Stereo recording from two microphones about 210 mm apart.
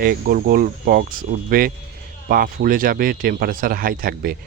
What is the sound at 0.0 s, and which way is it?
Speech, 45° right (ahead or behind).